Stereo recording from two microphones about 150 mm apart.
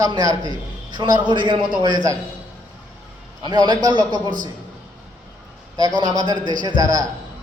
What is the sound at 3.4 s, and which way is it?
Speech, 30° right (ahead or behind).